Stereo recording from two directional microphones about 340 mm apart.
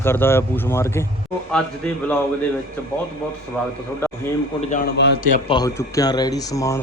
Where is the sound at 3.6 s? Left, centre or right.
Centre.